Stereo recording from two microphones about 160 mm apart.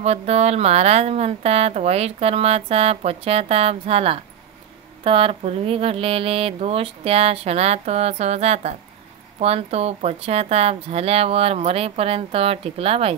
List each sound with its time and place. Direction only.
0.0 s a woman's voice: 40° right (ahead or behind)